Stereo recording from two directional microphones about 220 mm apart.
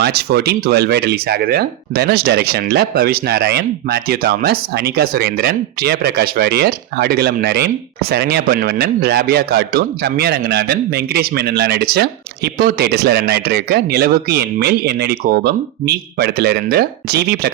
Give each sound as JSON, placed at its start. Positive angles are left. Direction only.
{"t": 0.0, "sound": "speech", "side_deg": -45}